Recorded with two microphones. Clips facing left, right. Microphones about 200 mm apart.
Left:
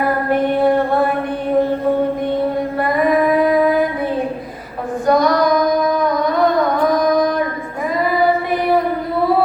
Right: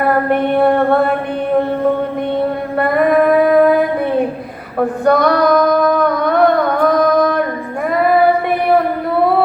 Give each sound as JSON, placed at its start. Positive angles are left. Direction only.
{"t": 0.1, "sound": "female singing", "side_deg": -60}
{"t": 2.7, "sound": "female singing", "side_deg": -60}
{"t": 5.0, "sound": "singing", "side_deg": -60}
{"t": 7.9, "sound": "child singing", "side_deg": -60}